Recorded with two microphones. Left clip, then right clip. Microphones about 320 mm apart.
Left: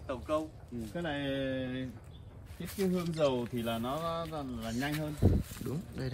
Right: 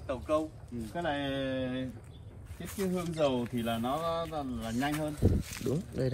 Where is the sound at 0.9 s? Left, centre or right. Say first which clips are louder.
Right 3 dB; centre.